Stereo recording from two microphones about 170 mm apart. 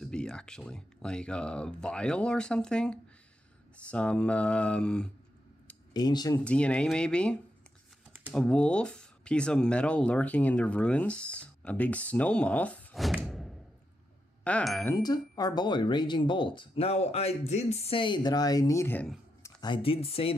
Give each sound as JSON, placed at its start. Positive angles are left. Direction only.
{"t": 0.0, "sound": "speech", "side_deg": 5}
{"t": 5.9, "sound": "speech", "side_deg": 25}
{"t": 6.4, "sound": "speech", "side_deg": 5}
{"t": 14.9, "sound": "speech", "side_deg": 25}
{"t": 19.4, "sound": "speech", "side_deg": 25}